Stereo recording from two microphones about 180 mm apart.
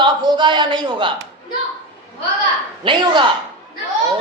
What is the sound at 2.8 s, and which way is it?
Speech, 25° right (ahead or behind).